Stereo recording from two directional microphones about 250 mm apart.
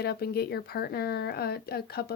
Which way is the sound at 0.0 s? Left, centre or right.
Left.